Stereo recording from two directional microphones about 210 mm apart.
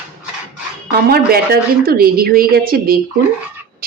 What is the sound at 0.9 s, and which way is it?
A woman's voice, 45° right (ahead or behind).